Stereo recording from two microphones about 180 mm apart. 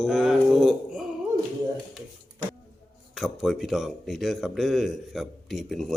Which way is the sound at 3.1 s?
Centre (ahead or behind).